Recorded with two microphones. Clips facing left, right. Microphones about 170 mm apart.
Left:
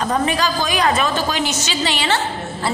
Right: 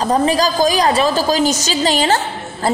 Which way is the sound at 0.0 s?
35° right (ahead or behind).